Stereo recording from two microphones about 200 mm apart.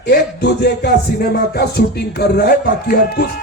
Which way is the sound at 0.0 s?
55° left (ahead or behind).